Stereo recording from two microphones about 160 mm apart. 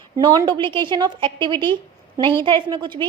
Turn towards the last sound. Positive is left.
turn(degrees=-30)  # may be behind; listen again after turning